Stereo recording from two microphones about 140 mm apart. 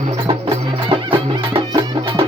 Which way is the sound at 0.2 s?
40° right (ahead or behind).